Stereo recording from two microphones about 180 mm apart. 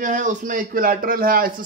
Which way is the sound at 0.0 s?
45° right (ahead or behind).